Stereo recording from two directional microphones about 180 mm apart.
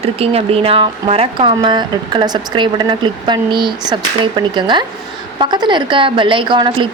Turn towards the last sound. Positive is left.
turn(degrees=-25)  # may be behind; listen again after turning